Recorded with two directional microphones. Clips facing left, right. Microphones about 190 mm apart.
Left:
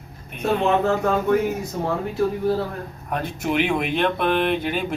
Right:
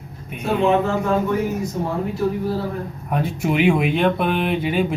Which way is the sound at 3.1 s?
5° right (ahead or behind).